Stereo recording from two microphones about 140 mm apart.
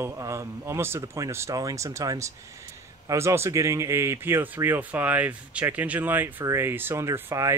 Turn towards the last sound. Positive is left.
turn(degrees=-20)  # may be behind; listen again after turning